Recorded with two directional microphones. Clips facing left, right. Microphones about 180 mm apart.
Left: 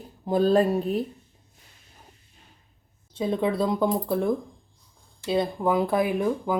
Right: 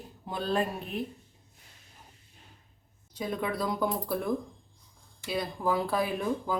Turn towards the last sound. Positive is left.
turn(degrees=15)  # may be behind; listen again after turning